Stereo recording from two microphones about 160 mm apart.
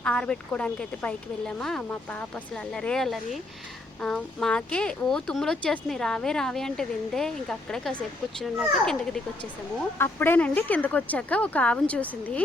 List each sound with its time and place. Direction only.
0.0 s speech: 5° left (ahead or behind)